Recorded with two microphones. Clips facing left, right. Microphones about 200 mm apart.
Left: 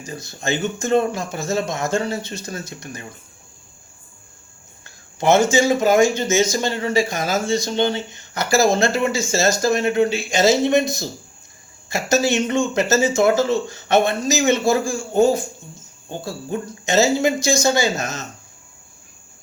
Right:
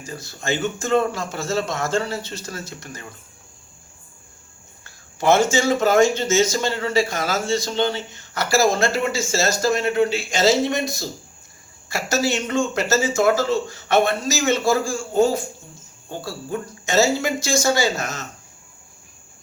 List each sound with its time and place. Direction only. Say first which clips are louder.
0.0 s speech: left 3 dB; 20° left (ahead or behind)
4.8 s speech: left 1 dB; 20° left (ahead or behind)